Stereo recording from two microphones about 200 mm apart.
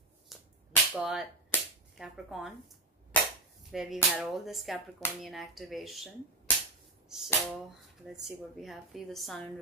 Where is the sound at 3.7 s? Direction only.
Centre (ahead or behind).